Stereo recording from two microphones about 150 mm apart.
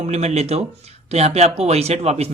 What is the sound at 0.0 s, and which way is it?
Speech, 45° right (ahead or behind).